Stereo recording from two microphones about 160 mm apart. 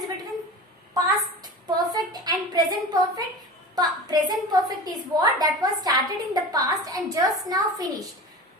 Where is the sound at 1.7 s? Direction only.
25° right (ahead or behind).